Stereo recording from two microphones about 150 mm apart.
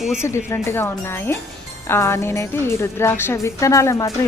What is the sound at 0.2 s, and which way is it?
A woman's voice, 15° left (ahead or behind).